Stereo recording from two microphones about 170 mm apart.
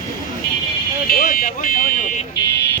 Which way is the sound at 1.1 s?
55° left (ahead or behind).